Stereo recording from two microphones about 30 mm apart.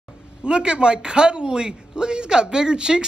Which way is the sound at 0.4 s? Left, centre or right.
Right.